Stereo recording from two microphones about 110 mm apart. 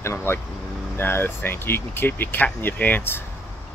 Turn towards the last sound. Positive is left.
turn(degrees=20)  # may be behind; listen again after turning